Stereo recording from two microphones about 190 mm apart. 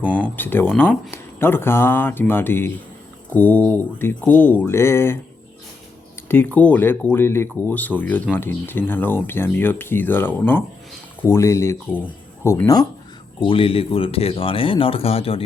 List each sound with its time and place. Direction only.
0.0 s a sound: 5° right (ahead or behind)
0.3 s speech: 10° left (ahead or behind)
6.2 s speech: 10° left (ahead or behind); by 15.4 s 30° left (ahead or behind)